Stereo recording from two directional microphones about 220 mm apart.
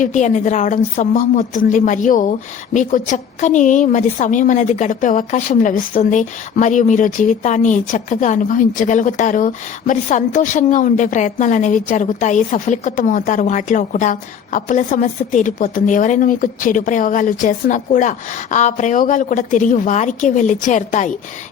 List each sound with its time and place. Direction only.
0.0 s a woman's voice: 35° left (ahead or behind)